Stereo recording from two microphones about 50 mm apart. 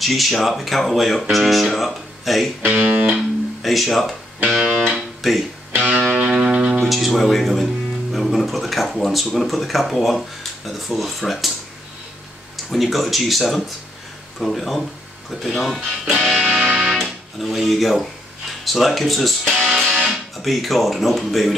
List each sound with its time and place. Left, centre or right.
0.0 s speech: centre
2.6 s speech: right
3.1 s speech: centre
4.6 s guitar: centre
5.8 s speech: centre
6.1 s music: centre
6.8 s speech: centre
12.6 s speech: centre
16.1 s music: centre
17.0 s speech: centre
19.7 s music: centre
20.1 s speech: centre